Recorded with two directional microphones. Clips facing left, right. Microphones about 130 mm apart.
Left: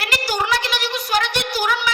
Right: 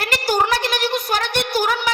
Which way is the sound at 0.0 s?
50° right (ahead or behind).